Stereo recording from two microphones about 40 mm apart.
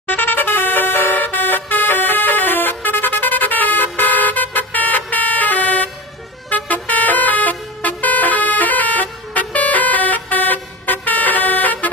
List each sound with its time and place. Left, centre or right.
0.1 s music: left
1.1 s vehicle horn: left
6.5 s vehicle: left